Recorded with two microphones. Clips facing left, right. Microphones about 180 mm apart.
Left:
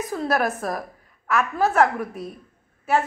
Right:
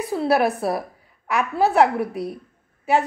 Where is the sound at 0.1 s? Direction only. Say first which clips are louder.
Right 5 dB; 10° right (ahead or behind).